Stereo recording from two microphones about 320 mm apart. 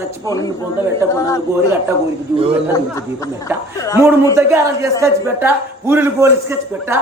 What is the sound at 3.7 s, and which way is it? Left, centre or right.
Speech, centre.